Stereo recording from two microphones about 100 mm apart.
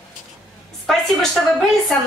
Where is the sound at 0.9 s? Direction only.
Centre (ahead or behind).